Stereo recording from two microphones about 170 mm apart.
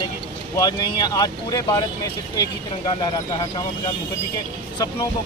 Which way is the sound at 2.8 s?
30° left (ahead or behind).